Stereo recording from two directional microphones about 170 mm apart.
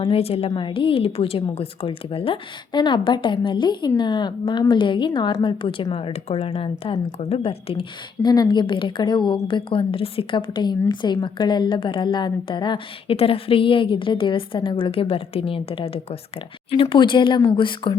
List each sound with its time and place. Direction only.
0.0 s speech: 35° left (ahead or behind)